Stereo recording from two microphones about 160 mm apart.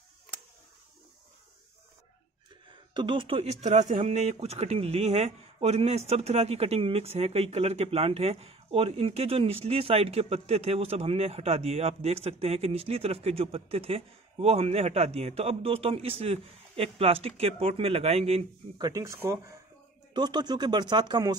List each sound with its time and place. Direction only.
2.9 s speech: 30° right (ahead or behind)
18.8 s speech: 20° right (ahead or behind)